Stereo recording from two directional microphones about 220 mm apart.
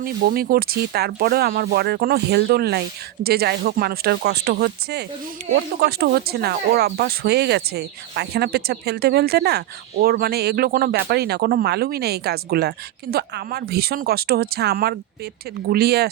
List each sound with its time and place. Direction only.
0.0 s speech: 40° right (ahead or behind)